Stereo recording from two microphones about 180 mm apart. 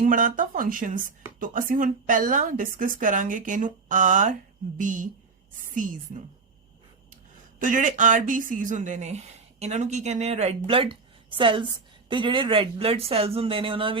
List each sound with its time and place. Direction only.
0.0 s a woman's voice: 45° right (ahead or behind)
7.6 s a woman's voice: 45° right (ahead or behind); by 14.0 s 30° right (ahead or behind)